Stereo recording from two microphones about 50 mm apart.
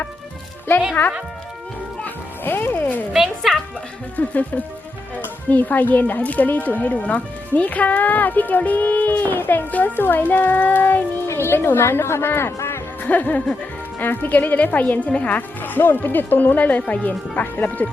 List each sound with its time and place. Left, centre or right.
1.0 s speech: left
2.0 s music: left
4.2 s a child's voice: left
13.0 s a child's voice: left